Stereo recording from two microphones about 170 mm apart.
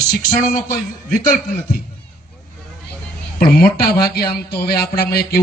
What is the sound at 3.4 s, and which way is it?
Speech, 65° left (ahead or behind).